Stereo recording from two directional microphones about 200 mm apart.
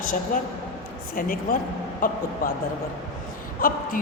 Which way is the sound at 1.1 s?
45° left (ahead or behind).